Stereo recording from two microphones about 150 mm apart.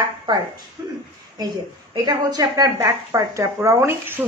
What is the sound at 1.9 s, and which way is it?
A woman's voice, 25° right (ahead or behind).